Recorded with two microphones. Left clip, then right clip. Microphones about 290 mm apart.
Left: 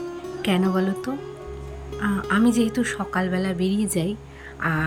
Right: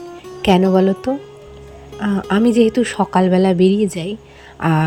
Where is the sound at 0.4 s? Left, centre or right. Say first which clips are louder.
Right 10 dB; centre.